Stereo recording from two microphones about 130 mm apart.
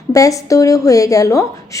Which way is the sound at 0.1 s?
25° left (ahead or behind).